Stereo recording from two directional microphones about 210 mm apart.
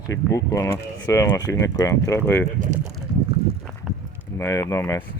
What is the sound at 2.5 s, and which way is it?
Speech, 35° right (ahead or behind).